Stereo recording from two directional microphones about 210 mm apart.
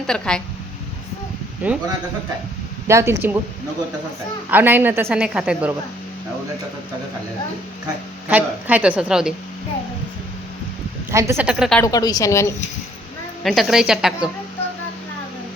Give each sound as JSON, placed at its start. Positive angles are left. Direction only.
{"t": 0.1, "sound": "a woman's voice", "side_deg": 5}
{"t": 1.6, "sound": "a woman's voice", "side_deg": -5}
{"t": 2.8, "sound": "a woman's voice", "side_deg": -15}
{"t": 4.5, "sound": "a woman's voice", "side_deg": -10}
{"t": 8.3, "sound": "a woman's voice", "side_deg": -10}
{"t": 11.1, "sound": "a woman's voice", "side_deg": -15}
{"t": 11.8, "sound": "a woman's voice", "side_deg": 20}
{"t": 13.4, "sound": "a woman's voice", "side_deg": 0}